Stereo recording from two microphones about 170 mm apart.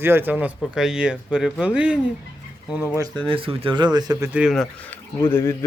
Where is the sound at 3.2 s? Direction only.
30° right (ahead or behind).